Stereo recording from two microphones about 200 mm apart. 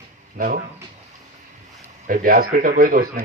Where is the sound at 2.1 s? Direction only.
45° right (ahead or behind).